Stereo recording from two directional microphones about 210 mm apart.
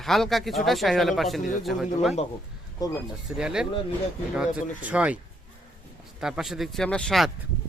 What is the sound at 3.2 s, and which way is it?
Speech, 5° right (ahead or behind).